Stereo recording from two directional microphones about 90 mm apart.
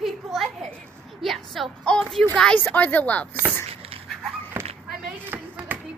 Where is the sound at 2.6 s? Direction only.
20° left (ahead or behind).